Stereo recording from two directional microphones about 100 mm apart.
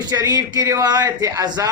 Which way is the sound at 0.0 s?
40° right (ahead or behind).